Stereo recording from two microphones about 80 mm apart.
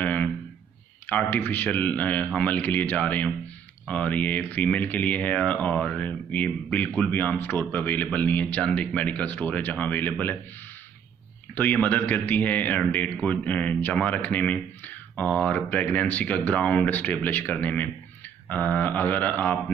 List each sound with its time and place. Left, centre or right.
0.0 s a sound: centre
1.0 s speech: left
11.5 s speech: left